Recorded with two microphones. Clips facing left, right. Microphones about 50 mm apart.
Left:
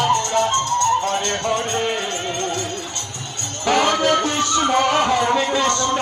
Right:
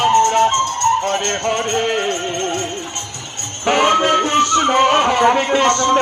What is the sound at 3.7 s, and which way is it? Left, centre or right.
Music, right.